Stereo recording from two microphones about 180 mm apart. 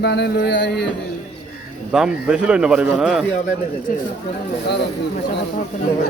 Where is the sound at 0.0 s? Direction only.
70° left (ahead or behind).